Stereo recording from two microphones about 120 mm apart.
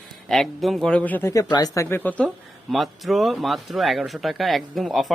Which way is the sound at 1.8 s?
15° left (ahead or behind).